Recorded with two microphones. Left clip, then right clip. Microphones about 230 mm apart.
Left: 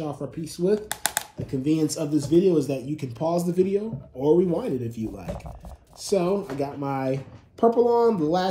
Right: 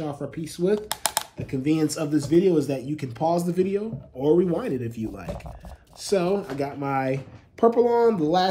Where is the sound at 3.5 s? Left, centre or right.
Right.